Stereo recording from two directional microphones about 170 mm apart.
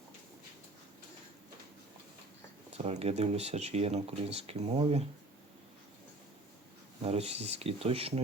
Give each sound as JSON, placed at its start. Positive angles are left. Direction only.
{"t": 2.7, "sound": "speech", "side_deg": -40}
{"t": 7.0, "sound": "speech", "side_deg": -40}